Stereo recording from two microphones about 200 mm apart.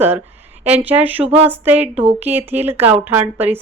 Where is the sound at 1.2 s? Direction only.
30° right (ahead or behind).